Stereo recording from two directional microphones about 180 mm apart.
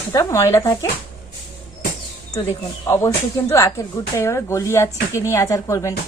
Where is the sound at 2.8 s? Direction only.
15° left (ahead or behind).